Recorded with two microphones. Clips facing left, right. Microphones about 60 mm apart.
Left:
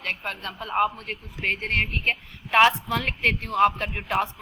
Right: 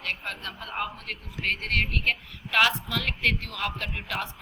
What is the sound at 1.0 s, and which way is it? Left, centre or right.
A woman's voice, left.